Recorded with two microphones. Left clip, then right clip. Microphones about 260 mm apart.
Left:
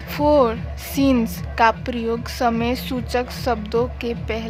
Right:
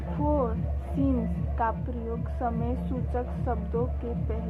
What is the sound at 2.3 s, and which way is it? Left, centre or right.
A woman's voice, left.